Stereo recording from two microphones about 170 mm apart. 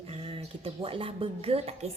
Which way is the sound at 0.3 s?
30° right (ahead or behind).